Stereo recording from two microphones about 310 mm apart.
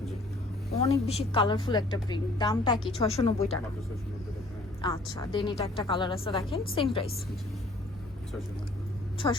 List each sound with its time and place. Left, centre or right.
0.7 s a woman's voice: centre
4.8 s a woman's voice: centre
9.1 s a woman's voice: centre